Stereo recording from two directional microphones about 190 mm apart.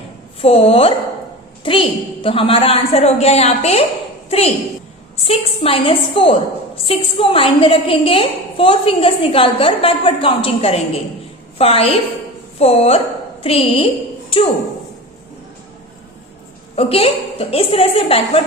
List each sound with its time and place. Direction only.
0.4 s a woman's voice: 30° left (ahead or behind)
16.7 s a woman's voice: 30° left (ahead or behind)